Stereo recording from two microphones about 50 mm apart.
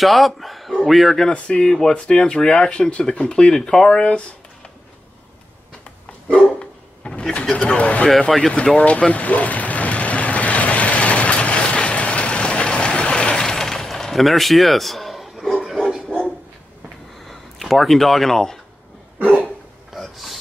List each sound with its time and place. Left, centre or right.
0.0 s a man's voice: centre
1.3 s speech: centre
6.2 s dog: left
7.6 s speech: left
8.1 s a man's voice: centre
8.7 s vehicle: left; by 15.4 s centre
16.1 s dog: left
17.3 s speech: centre
19.9 s a sound: centre